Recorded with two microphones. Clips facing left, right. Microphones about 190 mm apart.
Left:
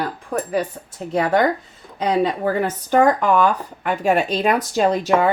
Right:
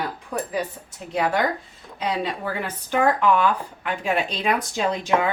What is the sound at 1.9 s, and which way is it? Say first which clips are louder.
Speech: left 7 dB; 45° left (ahead or behind).